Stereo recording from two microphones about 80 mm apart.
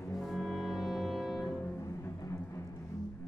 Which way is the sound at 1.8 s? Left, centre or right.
Left.